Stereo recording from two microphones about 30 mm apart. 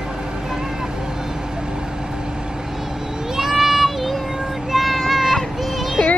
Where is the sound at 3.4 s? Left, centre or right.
Centre.